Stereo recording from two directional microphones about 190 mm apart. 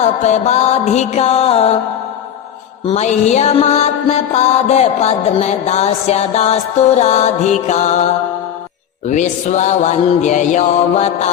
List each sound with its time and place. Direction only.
0.0 s mantra: 35° left (ahead or behind)
2.8 s mantra: 35° left (ahead or behind)